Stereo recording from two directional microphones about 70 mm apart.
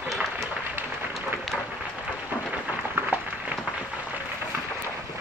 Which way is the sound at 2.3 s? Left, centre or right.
Right.